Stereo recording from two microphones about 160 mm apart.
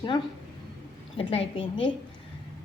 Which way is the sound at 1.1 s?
35° left (ahead or behind).